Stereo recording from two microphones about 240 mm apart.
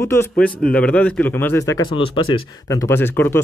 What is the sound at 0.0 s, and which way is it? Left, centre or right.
A man's voice, centre.